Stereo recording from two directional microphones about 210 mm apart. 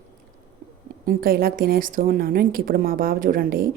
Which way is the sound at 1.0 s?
45° right (ahead or behind).